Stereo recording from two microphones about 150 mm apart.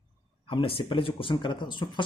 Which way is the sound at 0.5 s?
35° left (ahead or behind).